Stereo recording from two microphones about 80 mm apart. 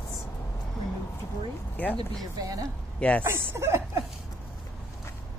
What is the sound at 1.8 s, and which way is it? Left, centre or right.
Speech, centre.